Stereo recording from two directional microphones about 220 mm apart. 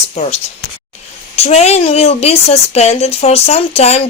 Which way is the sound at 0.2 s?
30° left (ahead or behind).